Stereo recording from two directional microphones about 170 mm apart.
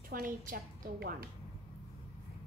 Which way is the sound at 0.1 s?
55° right (ahead or behind).